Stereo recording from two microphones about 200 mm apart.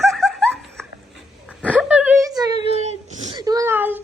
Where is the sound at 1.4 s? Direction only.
5° right (ahead or behind).